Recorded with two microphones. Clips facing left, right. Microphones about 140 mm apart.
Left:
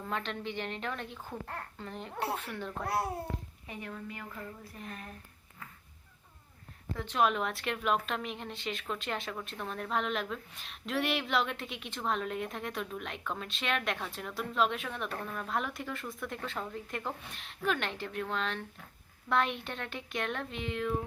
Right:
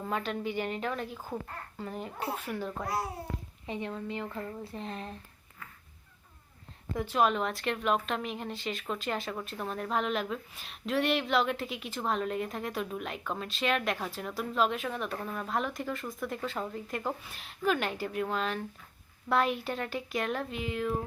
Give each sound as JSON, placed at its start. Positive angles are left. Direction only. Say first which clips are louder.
{"t": 0.0, "sound": "a child's voice", "louder": "right 4 dB", "side_deg": -5}
{"t": 2.8, "sound": "a child's voice", "louder": "left 3 dB", "side_deg": 60}
{"t": 3.7, "sound": "speech", "louder": "right 7 dB", "side_deg": -25}
{"t": 6.9, "sound": "speech", "louder": "right 2 dB", "side_deg": -10}